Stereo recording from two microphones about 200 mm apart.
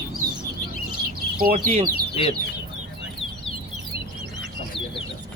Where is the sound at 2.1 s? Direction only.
30° left (ahead or behind).